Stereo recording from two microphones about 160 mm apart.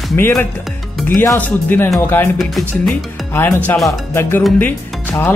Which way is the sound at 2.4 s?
Centre (ahead or behind).